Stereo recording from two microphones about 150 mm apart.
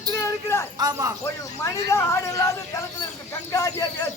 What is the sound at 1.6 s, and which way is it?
A woman's voice, 20° left (ahead or behind).